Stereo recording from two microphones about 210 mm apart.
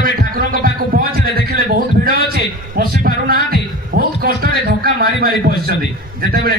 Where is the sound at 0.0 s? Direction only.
40° right (ahead or behind).